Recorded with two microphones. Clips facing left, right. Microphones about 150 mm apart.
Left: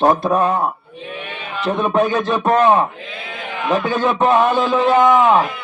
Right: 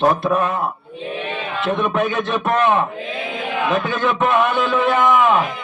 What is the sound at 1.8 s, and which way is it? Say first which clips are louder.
A man's voice: left 6 dB; 35° left (ahead or behind).